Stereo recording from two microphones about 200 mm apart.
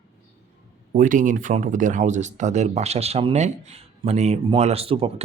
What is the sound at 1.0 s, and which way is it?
Speech, 40° right (ahead or behind).